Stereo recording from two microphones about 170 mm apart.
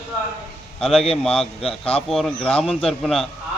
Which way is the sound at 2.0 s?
Centre (ahead or behind).